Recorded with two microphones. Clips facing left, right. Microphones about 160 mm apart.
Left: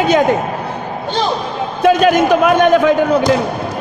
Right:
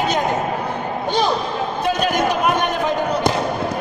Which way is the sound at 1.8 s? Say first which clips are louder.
Left 9 dB; 90° left.